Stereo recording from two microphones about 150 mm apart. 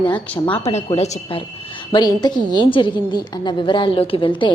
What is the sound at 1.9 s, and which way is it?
A woman's voice, 30° left (ahead or behind).